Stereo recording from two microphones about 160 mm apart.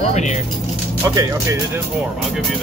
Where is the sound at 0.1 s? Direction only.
45° left (ahead or behind).